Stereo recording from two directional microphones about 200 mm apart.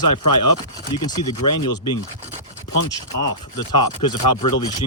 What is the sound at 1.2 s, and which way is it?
Speech, 20° left (ahead or behind).